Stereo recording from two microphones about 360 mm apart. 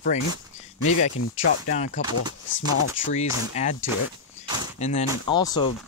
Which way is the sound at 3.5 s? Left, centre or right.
Centre.